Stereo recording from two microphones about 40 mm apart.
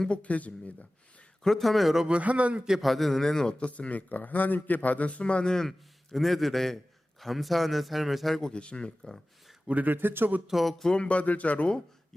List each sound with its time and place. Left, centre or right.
0.1 s a man's voice: left
1.5 s a man's voice: centre
2.2 s a man's voice: right
2.8 s a man's voice: centre
3.6 s a man's voice: left
5.5 s a man's voice: centre
8.5 s speech: left
9.8 s speech: right
10.4 s a man's voice: centre
10.9 s a man's voice: left